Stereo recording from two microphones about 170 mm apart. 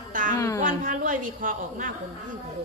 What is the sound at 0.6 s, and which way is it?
A man's voice, 50° right (ahead or behind).